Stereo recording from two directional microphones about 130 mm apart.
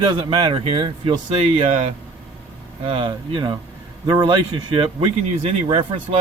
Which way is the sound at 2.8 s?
40° right (ahead or behind).